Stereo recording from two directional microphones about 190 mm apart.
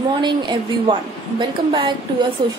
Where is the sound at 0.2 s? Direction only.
25° right (ahead or behind).